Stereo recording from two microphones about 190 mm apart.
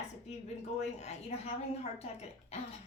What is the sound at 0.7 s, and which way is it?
Speech, 35° left (ahead or behind).